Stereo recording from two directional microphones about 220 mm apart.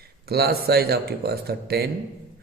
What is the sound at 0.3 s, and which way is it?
Speech, 45° right (ahead or behind).